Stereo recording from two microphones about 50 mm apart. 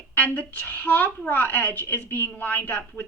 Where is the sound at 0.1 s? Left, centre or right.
Left.